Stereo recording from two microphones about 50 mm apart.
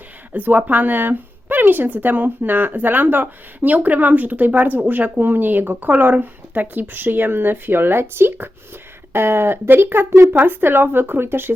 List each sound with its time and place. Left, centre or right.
0.3 s speech: right